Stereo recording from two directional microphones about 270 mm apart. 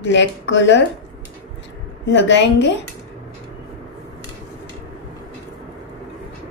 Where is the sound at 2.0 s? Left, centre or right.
Left.